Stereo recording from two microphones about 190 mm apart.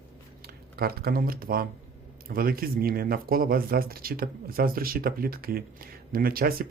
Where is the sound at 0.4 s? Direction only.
55° right (ahead or behind).